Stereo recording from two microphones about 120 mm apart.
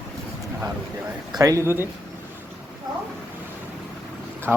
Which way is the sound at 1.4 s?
30° right (ahead or behind).